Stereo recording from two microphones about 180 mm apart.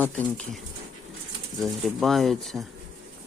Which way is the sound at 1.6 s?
Centre (ahead or behind).